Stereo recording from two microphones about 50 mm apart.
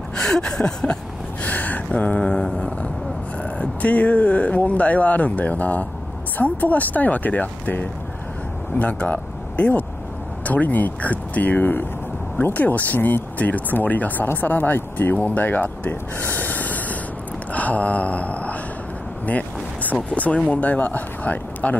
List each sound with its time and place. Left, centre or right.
0.1 s a sound: centre
1.4 s speech: left
2.4 s a sound: centre
3.4 s speech: left
16.2 s snort: left
17.5 s speech: left